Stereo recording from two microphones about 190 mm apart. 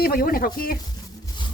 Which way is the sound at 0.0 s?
50° left (ahead or behind).